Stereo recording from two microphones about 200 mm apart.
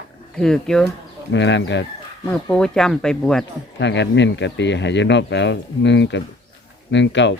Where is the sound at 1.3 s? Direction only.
65° left (ahead or behind).